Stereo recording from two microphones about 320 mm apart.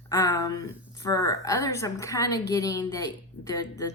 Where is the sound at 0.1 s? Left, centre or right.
Centre.